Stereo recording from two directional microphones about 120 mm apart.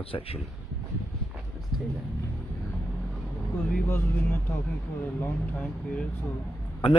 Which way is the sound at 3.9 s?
20° left (ahead or behind).